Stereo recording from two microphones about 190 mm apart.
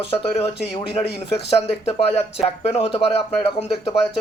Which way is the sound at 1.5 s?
30° left (ahead or behind).